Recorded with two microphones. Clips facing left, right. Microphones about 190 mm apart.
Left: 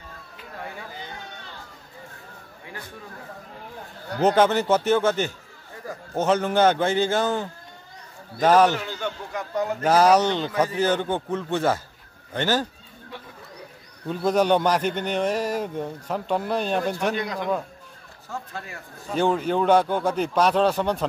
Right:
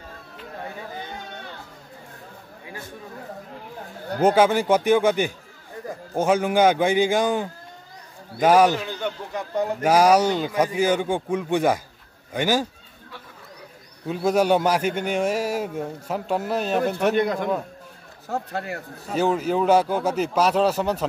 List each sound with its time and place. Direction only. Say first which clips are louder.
4.2 s a man's voice: right 1 dB; 10° right (ahead or behind)
14.0 s a man's voice: right 1 dB; 5° right (ahead or behind)
17.1 s a man's voice: right 6 dB; 55° right (ahead or behind)
18.5 s speech: right 8 dB; 70° right (ahead or behind)
19.1 s speech: right 1 dB; 5° right (ahead or behind)